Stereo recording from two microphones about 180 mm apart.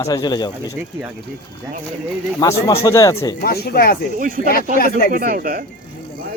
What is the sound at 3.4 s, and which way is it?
Speech, 60° left (ahead or behind).